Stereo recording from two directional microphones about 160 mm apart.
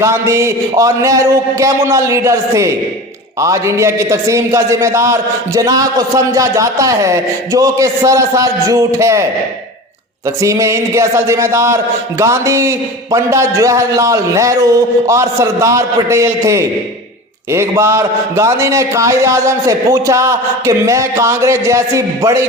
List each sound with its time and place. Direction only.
0.0 s a man's voice: 15° right (ahead or behind)
10.2 s a man's voice: 20° right (ahead or behind)